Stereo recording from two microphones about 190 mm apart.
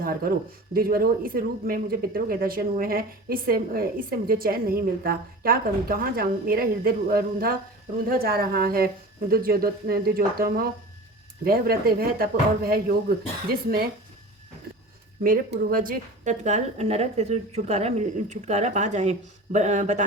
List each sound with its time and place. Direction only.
0.0 s speech: 50° right (ahead or behind)
15.2 s a woman's voice: 50° right (ahead or behind)